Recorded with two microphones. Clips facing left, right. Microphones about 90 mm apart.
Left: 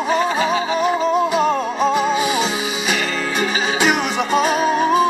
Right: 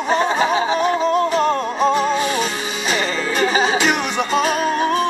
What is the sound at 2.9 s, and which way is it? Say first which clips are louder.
Music: right 3 dB; 35° right (ahead or behind).